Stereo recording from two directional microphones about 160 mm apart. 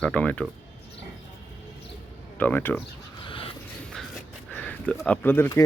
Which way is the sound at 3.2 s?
30° left (ahead or behind).